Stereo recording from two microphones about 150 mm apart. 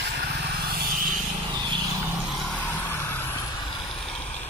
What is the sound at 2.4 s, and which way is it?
Vehicle, centre (ahead or behind).